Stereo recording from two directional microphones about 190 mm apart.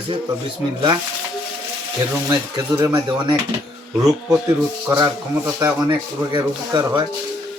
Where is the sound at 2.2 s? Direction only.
15° right (ahead or behind).